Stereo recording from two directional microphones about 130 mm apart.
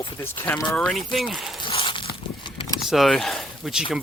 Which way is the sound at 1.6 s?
40° left (ahead or behind).